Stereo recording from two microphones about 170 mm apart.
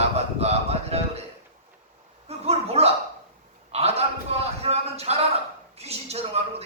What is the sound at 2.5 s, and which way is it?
A man's voice, 35° right (ahead or behind).